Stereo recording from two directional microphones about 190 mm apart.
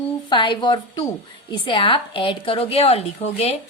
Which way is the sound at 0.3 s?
25° left (ahead or behind).